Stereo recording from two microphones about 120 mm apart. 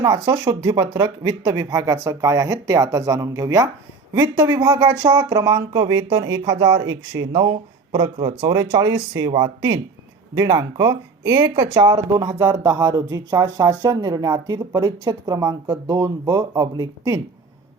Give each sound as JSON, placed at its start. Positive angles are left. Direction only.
{"t": 0.0, "sound": "speech", "side_deg": -30}
{"t": 5.0, "sound": "speech", "side_deg": -35}
{"t": 10.3, "sound": "speech", "side_deg": -30}